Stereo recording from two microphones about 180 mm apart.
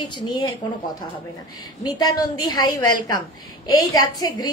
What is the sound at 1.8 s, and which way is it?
A woman's voice, 25° left (ahead or behind).